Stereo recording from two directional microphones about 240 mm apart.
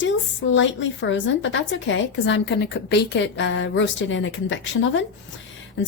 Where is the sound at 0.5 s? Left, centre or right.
Left.